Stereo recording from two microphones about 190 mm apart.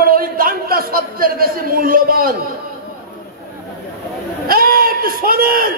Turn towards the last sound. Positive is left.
turn(degrees=-50)  # may be behind; listen again after turning